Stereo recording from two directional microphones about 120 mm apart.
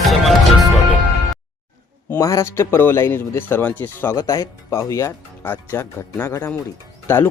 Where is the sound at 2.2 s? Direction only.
30° left (ahead or behind).